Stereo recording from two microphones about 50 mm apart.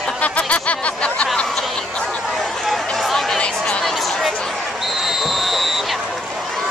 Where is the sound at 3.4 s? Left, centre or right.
Centre.